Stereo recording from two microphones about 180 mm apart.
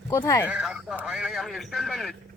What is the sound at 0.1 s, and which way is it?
Speech, 15° left (ahead or behind).